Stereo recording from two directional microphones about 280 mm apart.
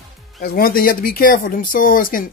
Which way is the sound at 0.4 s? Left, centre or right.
Left.